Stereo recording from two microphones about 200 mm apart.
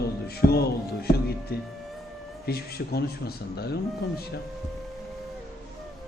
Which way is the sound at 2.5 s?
50° left (ahead or behind).